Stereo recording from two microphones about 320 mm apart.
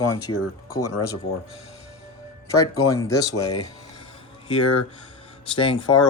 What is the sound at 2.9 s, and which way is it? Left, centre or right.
Speech, centre.